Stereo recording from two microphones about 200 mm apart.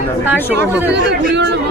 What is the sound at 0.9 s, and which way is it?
Speech, 55° right (ahead or behind).